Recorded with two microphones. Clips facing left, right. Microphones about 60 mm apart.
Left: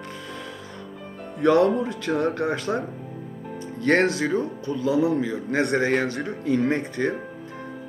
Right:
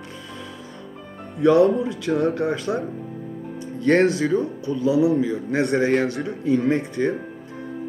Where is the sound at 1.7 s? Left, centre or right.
Left.